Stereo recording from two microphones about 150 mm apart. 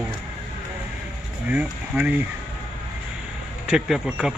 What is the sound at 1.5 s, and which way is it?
Speech, 10° right (ahead or behind).